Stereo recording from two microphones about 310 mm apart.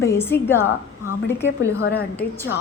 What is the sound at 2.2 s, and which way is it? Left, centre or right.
Speech, left.